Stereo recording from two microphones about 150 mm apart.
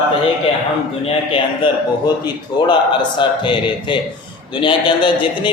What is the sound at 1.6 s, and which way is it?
Speech, 35° left (ahead or behind).